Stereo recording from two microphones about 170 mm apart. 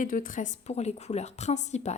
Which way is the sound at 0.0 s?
50° left (ahead or behind).